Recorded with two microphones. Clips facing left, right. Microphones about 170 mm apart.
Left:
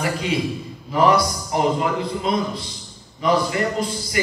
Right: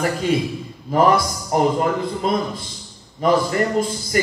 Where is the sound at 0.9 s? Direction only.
45° right (ahead or behind).